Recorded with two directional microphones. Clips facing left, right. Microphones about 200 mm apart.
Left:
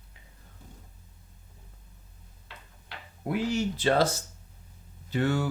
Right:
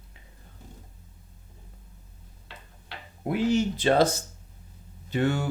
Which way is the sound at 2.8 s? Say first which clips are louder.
Right 3 dB; 25° right (ahead or behind).